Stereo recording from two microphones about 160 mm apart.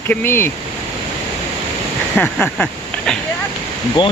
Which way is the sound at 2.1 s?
5° left (ahead or behind).